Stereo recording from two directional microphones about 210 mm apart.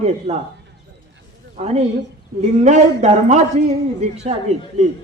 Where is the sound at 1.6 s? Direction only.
30° right (ahead or behind).